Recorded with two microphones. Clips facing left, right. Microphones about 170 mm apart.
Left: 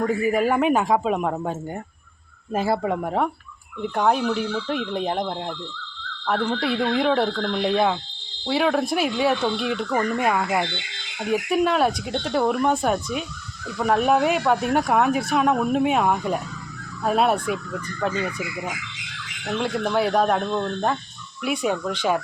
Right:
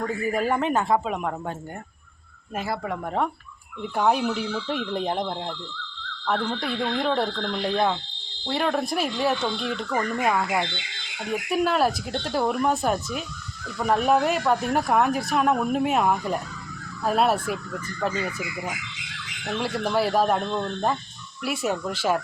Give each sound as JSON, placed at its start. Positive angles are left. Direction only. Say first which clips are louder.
{"t": 0.0, "sound": "speech", "louder": "left 5 dB", "side_deg": 15}
{"t": 0.3, "sound": "speech", "louder": "left 3 dB", "side_deg": 5}
{"t": 2.5, "sound": "speech", "louder": "left 6 dB", "side_deg": 30}
{"t": 3.8, "sound": "speech", "louder": "left 2 dB", "side_deg": 0}
{"t": 6.6, "sound": "speech", "louder": "left 4 dB", "side_deg": 5}